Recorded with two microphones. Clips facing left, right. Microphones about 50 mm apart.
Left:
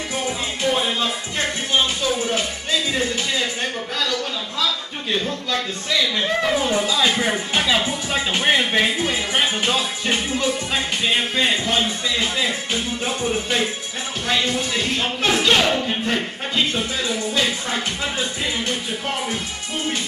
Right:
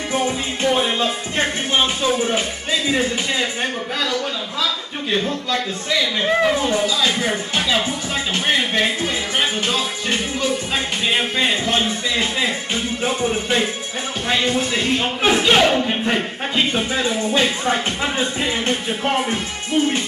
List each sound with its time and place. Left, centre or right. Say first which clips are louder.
0.7 s a man's voice: right 3 dB; centre
0.9 s a man's voice: right 3 dB; right; by 6.7 s centre
6.7 s a man's voice: even; centre; by 19.4 s right